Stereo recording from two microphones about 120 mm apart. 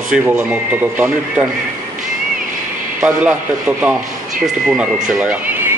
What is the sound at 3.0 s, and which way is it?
Speech, 10° right (ahead or behind).